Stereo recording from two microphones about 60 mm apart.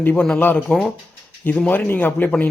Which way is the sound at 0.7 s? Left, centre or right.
Left.